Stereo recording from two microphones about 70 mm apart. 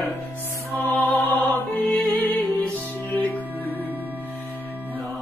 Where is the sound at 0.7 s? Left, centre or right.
Left.